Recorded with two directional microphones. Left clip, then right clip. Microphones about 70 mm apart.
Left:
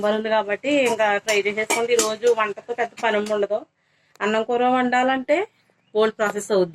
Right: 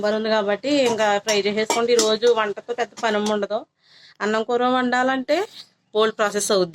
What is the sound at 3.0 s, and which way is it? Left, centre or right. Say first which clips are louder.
A woman's voice: left 1 dB; centre.